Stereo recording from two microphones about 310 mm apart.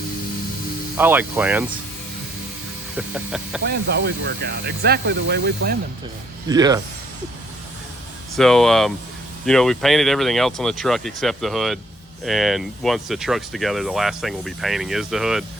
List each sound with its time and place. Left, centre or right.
0.9 s speech: centre
3.6 s speech: right
6.5 s speech: centre
8.4 s speech: centre